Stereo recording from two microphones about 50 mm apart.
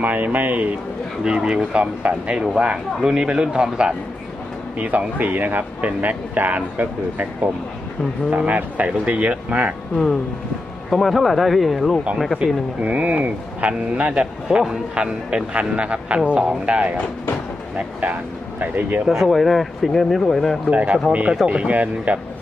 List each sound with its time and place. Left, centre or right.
0.0 s speech: right
1.2 s speech: centre
1.8 s speech: right
4.8 s speech: right
9.9 s speech: centre
12.4 s speech: right
18.0 s speech: right
19.0 s speech: centre
20.7 s speech: right